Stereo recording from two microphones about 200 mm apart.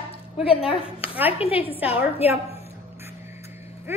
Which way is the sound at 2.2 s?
30° left (ahead or behind).